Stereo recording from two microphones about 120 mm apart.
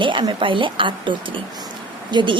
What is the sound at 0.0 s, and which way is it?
Speech, 40° right (ahead or behind).